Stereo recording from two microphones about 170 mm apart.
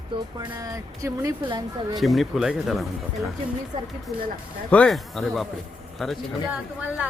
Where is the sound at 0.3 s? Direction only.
20° right (ahead or behind).